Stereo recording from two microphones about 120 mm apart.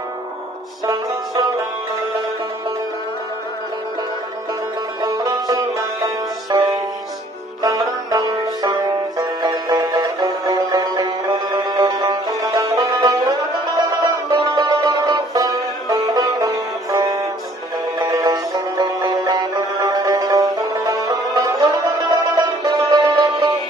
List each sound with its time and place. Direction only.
5.0 s music: 30° right (ahead or behind)
8.1 s music: 35° right (ahead or behind)